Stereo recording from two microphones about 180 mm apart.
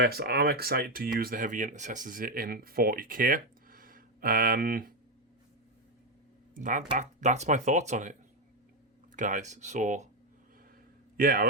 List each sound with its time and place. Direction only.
0.0 s speech: 60° right (ahead or behind)
6.5 s speech: 45° right (ahead or behind)
9.1 s speech: 45° right (ahead or behind)
11.2 s speech: 50° right (ahead or behind)